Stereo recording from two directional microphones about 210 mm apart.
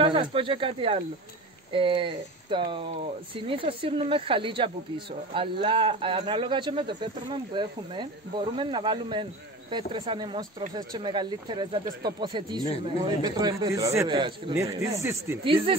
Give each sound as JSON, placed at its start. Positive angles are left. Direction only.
{"t": 0.0, "sound": "speech", "side_deg": -25}
{"t": 15.4, "sound": "speech", "side_deg": -25}